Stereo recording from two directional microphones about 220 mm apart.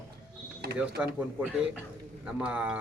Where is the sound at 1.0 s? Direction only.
5° right (ahead or behind).